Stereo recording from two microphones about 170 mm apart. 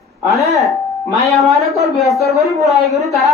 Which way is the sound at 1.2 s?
Centre (ahead or behind).